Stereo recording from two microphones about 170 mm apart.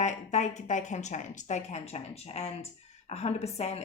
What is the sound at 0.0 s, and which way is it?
A woman's voice, 45° left (ahead or behind).